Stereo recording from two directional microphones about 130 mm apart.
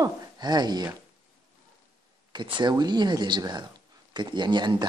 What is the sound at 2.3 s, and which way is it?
Speech, 35° right (ahead or behind).